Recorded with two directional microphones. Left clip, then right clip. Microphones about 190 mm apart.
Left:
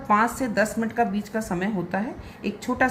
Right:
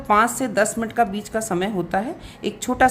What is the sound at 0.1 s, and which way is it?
A woman's voice, 40° right (ahead or behind).